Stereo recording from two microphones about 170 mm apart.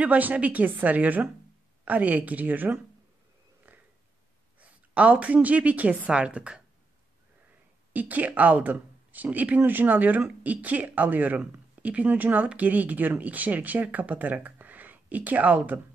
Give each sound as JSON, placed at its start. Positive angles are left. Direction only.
{"t": 0.0, "sound": "speech", "side_deg": -10}
{"t": 3.7, "sound": "a sound", "side_deg": -10}
{"t": 4.6, "sound": "a woman's voice", "side_deg": -10}
{"t": 7.9, "sound": "speech", "side_deg": -10}